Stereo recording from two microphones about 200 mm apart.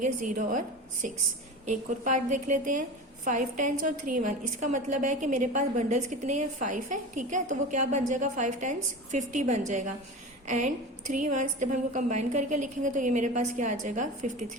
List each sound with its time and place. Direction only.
0.0 s a woman's voice: 40° right (ahead or behind)
11.1 s a woman's voice: 40° right (ahead or behind)